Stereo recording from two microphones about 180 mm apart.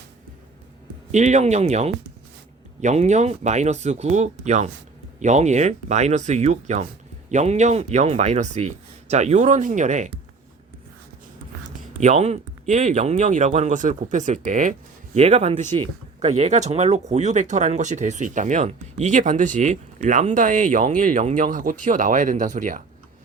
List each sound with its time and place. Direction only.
1.1 s speech: 40° right (ahead or behind)
11.9 s speech: 40° right (ahead or behind)